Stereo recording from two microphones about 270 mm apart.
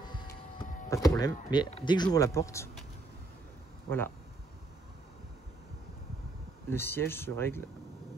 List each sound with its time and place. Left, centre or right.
0.0 s vehicle: centre
0.8 s speech: centre
6.7 s speech: centre